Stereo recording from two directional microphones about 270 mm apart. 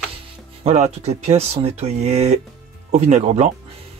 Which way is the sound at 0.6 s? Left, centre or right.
Right.